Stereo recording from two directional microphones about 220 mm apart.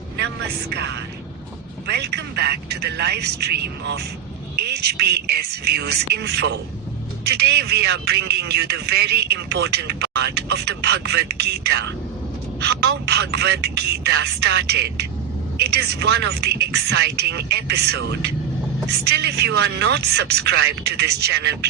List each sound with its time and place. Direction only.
1.9 s a man's voice: 50° right (ahead or behind)